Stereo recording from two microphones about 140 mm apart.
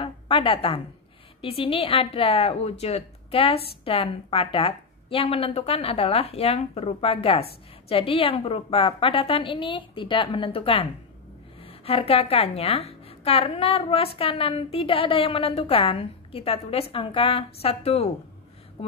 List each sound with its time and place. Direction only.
0.0 s a woman's voice: 40° left (ahead or behind)